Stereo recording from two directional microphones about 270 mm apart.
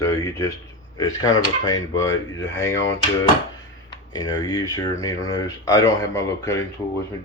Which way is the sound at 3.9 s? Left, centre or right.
Centre.